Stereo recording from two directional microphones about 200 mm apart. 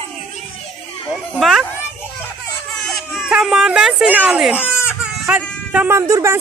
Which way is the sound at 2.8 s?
Centre (ahead or behind).